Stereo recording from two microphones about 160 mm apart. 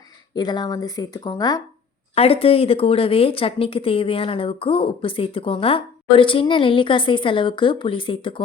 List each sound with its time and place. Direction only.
0.3 s speech: 25° left (ahead or behind)
2.1 s speech: 40° left (ahead or behind)